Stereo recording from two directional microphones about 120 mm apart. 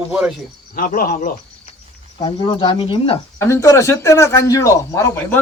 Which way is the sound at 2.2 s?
40° left (ahead or behind).